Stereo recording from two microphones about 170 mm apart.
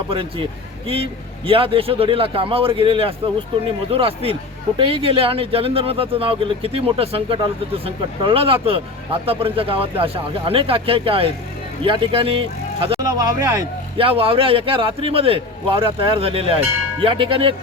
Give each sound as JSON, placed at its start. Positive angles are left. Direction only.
{"t": 0.1, "sound": "speech", "side_deg": -30}
{"t": 13.0, "sound": "speech", "side_deg": -20}
{"t": 13.9, "sound": "speech", "side_deg": -35}